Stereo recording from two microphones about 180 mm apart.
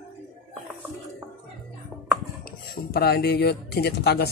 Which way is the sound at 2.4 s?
55° left (ahead or behind).